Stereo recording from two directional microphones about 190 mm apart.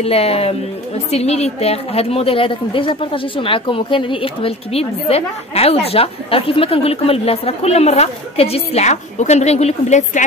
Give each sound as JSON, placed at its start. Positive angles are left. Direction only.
{"t": 0.0, "sound": "a woman's voice", "side_deg": 30}